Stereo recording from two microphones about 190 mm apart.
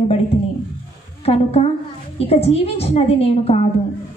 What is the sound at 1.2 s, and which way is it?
A woman's voice, 30° left (ahead or behind).